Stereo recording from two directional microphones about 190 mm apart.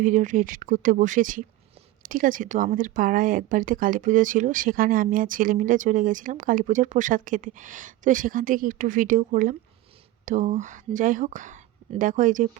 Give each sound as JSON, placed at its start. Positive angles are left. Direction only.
{"t": 0.0, "sound": "speech", "side_deg": -40}